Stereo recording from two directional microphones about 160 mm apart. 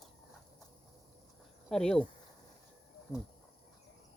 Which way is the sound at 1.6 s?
5° left (ahead or behind).